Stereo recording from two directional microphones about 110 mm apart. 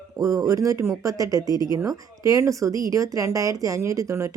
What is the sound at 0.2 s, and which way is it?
A woman's voice, 35° right (ahead or behind).